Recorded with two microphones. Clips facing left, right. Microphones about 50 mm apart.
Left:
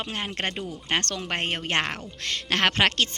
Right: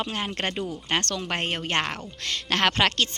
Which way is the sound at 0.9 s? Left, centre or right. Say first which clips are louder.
Even; left.